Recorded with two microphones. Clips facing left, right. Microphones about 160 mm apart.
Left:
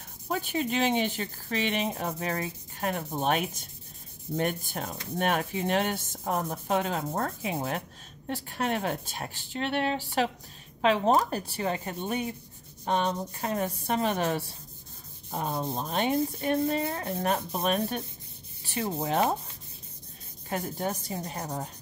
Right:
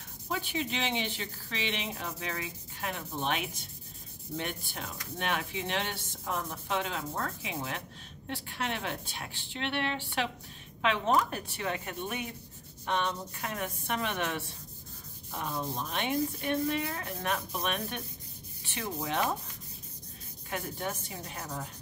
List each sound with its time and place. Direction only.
0.3 s speech: 45° left (ahead or behind)
8.3 s rub: 40° left (ahead or behind)
20.4 s rub: 35° left (ahead or behind)